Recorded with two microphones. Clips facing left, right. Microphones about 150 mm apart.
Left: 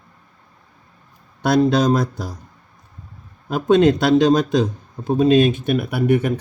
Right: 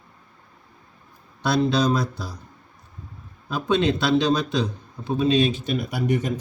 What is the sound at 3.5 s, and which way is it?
Speech, 50° left (ahead or behind).